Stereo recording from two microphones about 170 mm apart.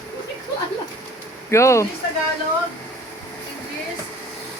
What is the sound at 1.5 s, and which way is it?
Speech, 15° left (ahead or behind).